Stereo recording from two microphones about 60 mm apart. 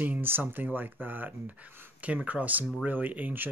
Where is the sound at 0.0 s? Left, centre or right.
Right.